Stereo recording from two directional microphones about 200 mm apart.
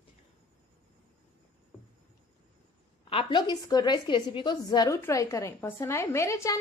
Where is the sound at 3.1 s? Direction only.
20° left (ahead or behind).